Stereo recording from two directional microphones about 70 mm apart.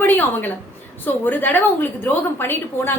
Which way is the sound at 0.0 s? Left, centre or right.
Left.